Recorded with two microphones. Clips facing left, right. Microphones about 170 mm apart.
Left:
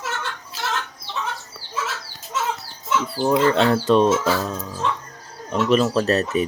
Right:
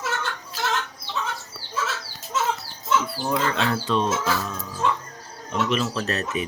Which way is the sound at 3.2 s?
40° left (ahead or behind).